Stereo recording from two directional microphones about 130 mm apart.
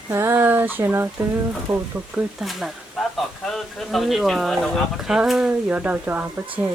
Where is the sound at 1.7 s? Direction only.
15° right (ahead or behind).